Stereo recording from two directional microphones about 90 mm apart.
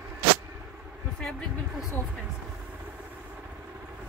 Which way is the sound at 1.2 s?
10° left (ahead or behind).